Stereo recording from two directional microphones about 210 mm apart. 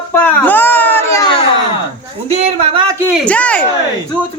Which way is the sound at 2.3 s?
30° right (ahead or behind).